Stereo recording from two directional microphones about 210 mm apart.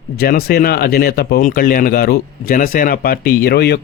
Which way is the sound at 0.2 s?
45° left (ahead or behind).